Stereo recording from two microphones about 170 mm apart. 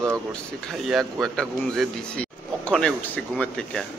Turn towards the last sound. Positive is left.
turn(degrees=5)  # may be behind; listen again after turning